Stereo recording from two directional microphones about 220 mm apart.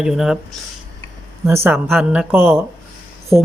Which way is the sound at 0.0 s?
Centre (ahead or behind).